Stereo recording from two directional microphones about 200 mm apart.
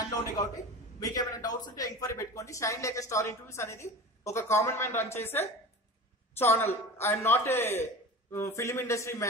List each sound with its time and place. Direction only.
0.9 s a man's voice: 20° left (ahead or behind)